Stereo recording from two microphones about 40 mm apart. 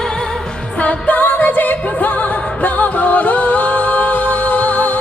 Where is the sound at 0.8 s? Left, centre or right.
Left.